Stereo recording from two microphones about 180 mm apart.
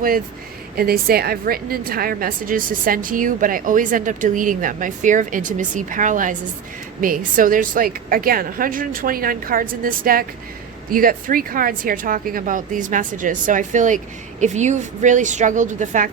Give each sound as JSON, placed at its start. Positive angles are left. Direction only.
{"t": 0.8, "sound": "a woman's voice", "side_deg": -55}
{"t": 7.3, "sound": "a woman's voice", "side_deg": -50}